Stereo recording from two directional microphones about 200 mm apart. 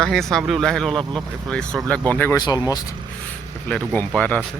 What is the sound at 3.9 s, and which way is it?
Speech, 5° left (ahead or behind).